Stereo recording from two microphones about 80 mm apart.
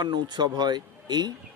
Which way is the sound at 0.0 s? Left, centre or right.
Right.